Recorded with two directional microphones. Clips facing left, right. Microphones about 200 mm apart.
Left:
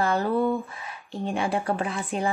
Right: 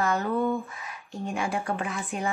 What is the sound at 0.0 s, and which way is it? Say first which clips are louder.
A woman's voice: left 2 dB; 30° left (ahead or behind).